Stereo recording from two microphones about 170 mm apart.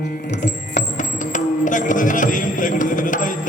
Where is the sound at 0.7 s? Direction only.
45° left (ahead or behind).